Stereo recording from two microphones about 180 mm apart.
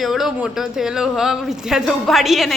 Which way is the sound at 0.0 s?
Centre (ahead or behind).